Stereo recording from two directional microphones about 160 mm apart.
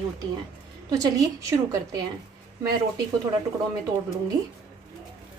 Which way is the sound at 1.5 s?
20° right (ahead or behind).